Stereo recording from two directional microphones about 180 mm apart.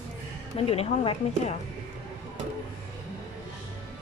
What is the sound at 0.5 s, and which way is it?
A woman's voice, 35° left (ahead or behind).